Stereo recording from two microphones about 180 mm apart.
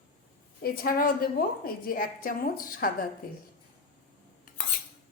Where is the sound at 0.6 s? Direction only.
55° left (ahead or behind).